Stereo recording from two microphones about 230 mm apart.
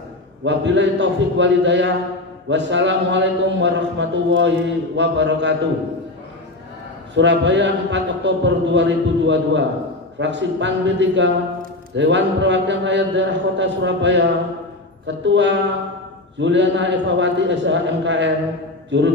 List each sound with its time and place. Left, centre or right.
0.4 s a man's voice: right
7.2 s a man's voice: right
18.9 s a sound: right